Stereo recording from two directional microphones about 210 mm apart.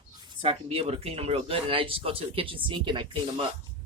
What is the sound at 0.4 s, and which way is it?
Speech, 30° right (ahead or behind).